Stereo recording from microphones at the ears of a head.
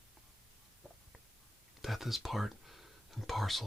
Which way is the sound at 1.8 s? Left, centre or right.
Centre.